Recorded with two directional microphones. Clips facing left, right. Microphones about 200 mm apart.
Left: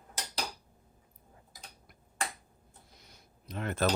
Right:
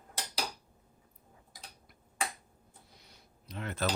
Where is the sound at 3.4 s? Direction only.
50° left (ahead or behind).